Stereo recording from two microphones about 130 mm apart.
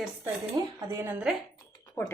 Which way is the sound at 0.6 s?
35° right (ahead or behind).